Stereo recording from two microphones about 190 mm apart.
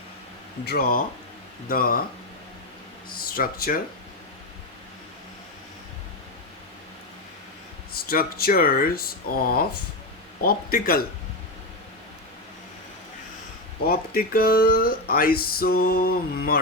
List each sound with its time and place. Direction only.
0.6 s speech: 55° left (ahead or behind)
3.1 s speech: 50° left (ahead or behind)
7.9 s speech: 50° left (ahead or behind)
13.8 s speech: 50° left (ahead or behind)